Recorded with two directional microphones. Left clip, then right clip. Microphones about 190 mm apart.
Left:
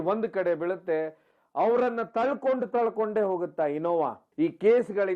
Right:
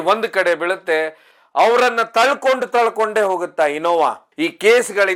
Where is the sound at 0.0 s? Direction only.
10° right (ahead or behind).